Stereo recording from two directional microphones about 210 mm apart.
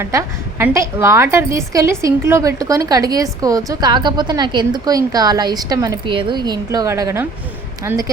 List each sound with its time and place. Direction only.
0.0 s a woman's voice: 10° right (ahead or behind)